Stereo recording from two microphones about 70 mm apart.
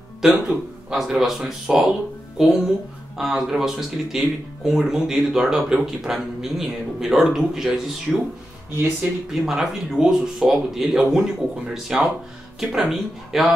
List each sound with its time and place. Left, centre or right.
0.2 s speech: centre
9.3 s speech: centre